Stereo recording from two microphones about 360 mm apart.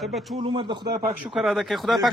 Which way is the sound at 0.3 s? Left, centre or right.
Centre.